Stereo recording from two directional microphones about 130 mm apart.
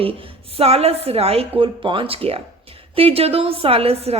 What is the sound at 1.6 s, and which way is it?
Speech, 40° right (ahead or behind).